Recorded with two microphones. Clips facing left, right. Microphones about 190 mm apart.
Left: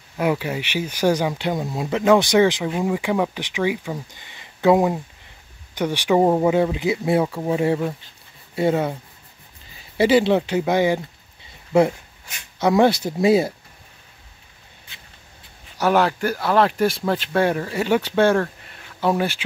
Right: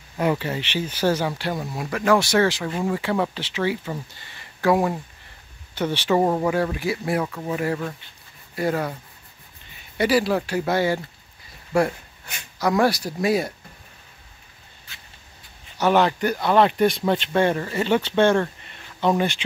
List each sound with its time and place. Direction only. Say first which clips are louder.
0.2 s speech: left 1 dB; 10° left (ahead or behind)
9.9 s speech: left 4 dB; 25° left (ahead or behind)
12.5 s speech: left 4 dB; 25° left (ahead or behind)
15.8 s speech: even; 5° left (ahead or behind)